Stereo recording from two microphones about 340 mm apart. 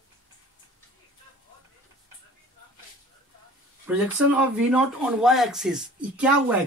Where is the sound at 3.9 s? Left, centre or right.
Centre.